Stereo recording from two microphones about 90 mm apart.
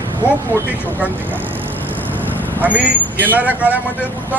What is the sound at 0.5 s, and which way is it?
Speech, 25° right (ahead or behind).